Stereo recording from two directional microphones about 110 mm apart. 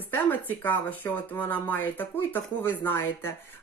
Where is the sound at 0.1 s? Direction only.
15° left (ahead or behind).